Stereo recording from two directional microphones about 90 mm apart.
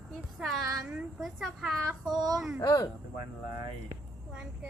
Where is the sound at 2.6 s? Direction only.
45° left (ahead or behind).